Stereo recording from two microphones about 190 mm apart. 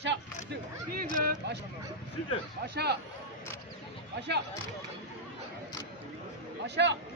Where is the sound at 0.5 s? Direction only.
50° right (ahead or behind).